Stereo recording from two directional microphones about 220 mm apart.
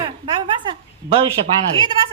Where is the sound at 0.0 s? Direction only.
20° right (ahead or behind).